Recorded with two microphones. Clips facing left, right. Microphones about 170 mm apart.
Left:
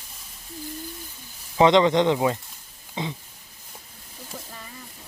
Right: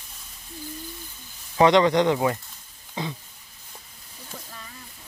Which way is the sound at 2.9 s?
20° left (ahead or behind).